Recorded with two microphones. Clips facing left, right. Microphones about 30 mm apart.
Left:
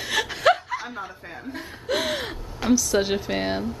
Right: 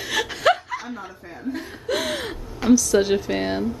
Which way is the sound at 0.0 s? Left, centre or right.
Centre.